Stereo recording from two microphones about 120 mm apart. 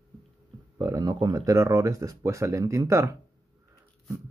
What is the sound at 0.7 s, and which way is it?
Speech, 30° right (ahead or behind).